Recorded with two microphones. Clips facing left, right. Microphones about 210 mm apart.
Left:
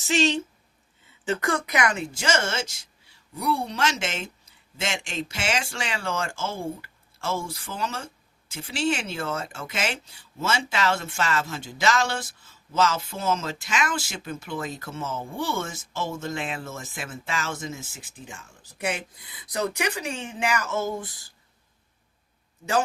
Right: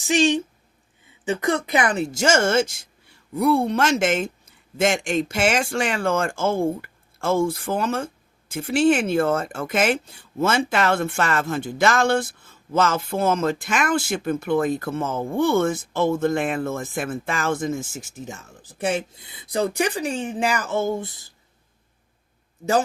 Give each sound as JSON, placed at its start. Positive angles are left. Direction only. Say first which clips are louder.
{"t": 0.0, "sound": "a woman's voice", "louder": "right 4 dB", "side_deg": -15}